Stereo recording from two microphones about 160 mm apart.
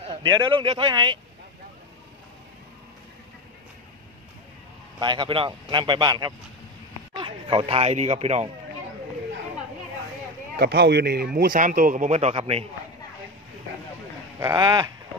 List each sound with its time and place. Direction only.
0.0 s speech: 30° right (ahead or behind)
4.9 s speech: 30° right (ahead or behind); by 8.5 s 45° right (ahead or behind)
10.6 s a man's voice: 85° right; by 12.6 s 40° right (ahead or behind)
14.4 s speech: 25° right (ahead or behind)